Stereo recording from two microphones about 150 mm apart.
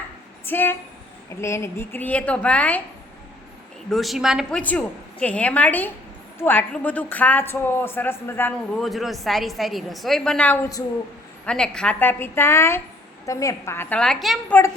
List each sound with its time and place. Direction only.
0.4 s a woman's voice: 15° left (ahead or behind)
3.8 s a woman's voice: centre (ahead or behind)
5.2 s a woman's voice: 10° left (ahead or behind)
8.7 s a woman's voice: centre (ahead or behind); by 14.0 s 15° left (ahead or behind)
14.0 s a woman's voice: centre (ahead or behind)